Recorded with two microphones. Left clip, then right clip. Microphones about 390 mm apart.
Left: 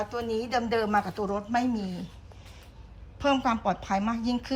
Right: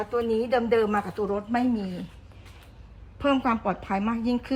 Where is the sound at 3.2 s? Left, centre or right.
Centre.